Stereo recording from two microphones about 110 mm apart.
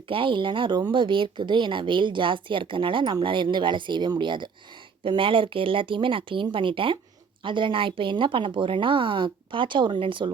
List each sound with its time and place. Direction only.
0.1 s speech: 50° right (ahead or behind)